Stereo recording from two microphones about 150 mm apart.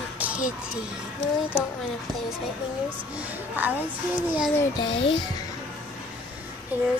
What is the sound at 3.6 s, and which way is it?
Speech, 15° right (ahead or behind).